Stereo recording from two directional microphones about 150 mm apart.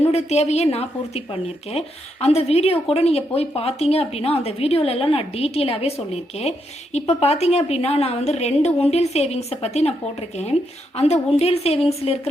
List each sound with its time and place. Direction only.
0.1 s a woman's voice: 45° left (ahead or behind)